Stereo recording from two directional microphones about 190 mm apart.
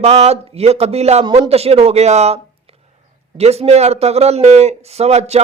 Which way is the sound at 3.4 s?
35° right (ahead or behind).